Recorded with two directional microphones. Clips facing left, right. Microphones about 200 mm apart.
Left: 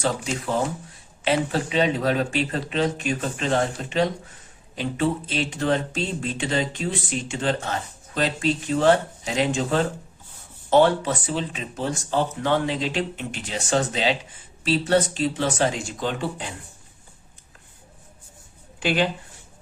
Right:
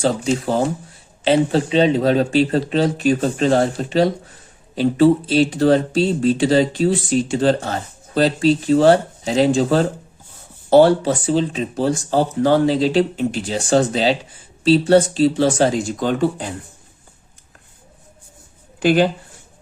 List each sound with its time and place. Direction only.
0.0 s speech: 30° right (ahead or behind)
18.8 s speech: 40° right (ahead or behind)